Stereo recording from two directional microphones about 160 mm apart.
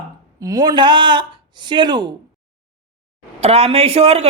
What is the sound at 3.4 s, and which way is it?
Speech, 40° right (ahead or behind).